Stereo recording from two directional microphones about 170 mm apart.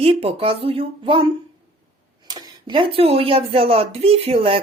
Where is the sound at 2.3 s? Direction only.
25° right (ahead or behind).